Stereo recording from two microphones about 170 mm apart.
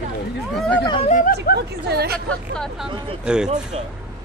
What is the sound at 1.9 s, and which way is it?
Speech, 70° right (ahead or behind).